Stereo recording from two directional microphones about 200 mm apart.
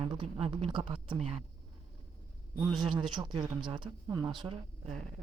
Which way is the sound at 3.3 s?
25° right (ahead or behind).